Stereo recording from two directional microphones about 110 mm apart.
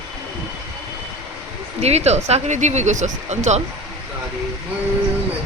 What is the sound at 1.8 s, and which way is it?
Speech, 80° right.